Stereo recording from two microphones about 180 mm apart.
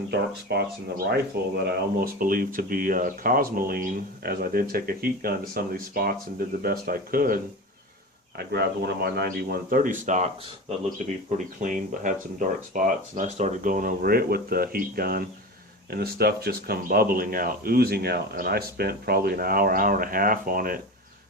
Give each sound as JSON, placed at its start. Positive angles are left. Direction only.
{"t": 0.1, "sound": "speech", "side_deg": -65}
{"t": 8.4, "sound": "speech", "side_deg": -65}